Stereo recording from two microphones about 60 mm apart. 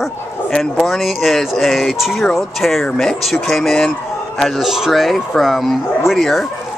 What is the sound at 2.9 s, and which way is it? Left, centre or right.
Speech, centre.